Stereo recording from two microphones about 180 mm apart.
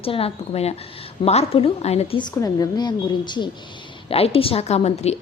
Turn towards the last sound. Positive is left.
turn(degrees=35)  # may be behind; listen again after turning